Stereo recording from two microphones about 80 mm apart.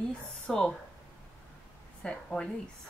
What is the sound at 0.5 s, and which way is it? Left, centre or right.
Speech, centre.